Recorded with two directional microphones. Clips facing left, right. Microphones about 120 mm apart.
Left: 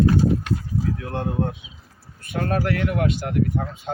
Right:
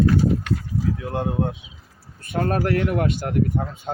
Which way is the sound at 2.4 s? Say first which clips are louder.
Right 2 dB; 30° right (ahead or behind).